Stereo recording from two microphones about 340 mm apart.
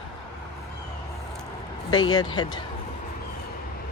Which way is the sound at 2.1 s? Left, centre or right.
Centre.